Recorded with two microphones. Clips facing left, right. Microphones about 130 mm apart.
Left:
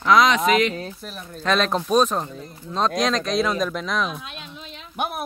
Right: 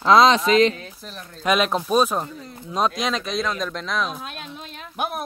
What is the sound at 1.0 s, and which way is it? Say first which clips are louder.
Speech: left 3 dB; 5° left (ahead or behind).